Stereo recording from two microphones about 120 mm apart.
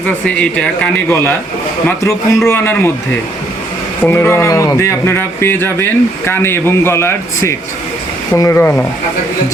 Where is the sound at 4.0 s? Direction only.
15° left (ahead or behind).